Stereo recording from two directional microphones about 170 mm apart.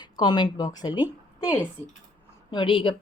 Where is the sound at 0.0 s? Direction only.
25° left (ahead or behind).